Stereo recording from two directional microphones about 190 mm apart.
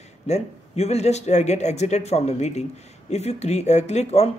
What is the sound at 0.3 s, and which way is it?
Speech, 35° left (ahead or behind).